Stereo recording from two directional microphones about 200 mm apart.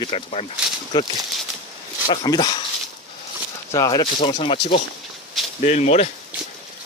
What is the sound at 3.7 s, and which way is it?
Speech, 20° left (ahead or behind).